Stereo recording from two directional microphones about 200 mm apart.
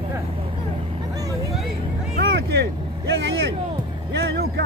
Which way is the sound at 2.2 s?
55° right (ahead or behind).